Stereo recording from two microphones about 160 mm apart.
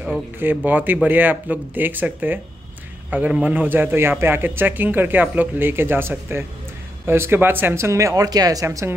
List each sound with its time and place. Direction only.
0.0 s a man's voice: 10° right (ahead or behind)